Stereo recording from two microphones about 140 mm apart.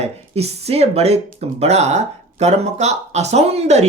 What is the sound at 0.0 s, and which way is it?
Speech, 50° right (ahead or behind).